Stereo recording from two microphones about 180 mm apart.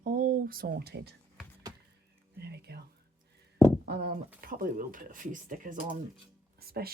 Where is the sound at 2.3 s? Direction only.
65° right (ahead or behind).